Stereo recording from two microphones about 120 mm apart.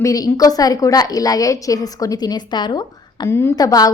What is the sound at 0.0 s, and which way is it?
A woman's voice, 30° left (ahead or behind).